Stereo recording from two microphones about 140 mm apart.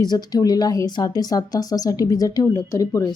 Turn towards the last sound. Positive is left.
turn(degrees=25)  # may be behind; listen again after turning